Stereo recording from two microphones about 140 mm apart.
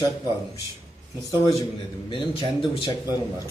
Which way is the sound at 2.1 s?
40° left (ahead or behind).